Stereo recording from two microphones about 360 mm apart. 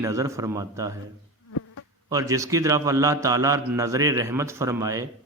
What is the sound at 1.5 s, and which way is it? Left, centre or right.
Insect, left.